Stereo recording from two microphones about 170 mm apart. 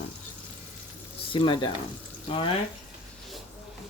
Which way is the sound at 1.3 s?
30° left (ahead or behind).